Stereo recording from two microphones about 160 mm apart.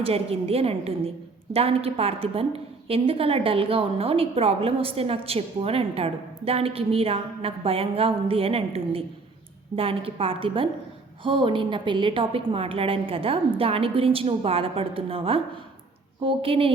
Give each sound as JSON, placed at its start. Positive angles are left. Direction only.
{"t": 0.0, "sound": "a woman's voice", "side_deg": -35}